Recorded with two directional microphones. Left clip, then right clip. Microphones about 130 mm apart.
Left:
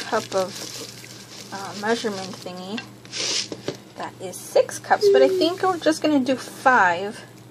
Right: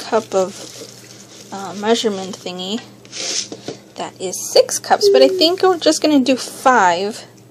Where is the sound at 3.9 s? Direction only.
40° right (ahead or behind).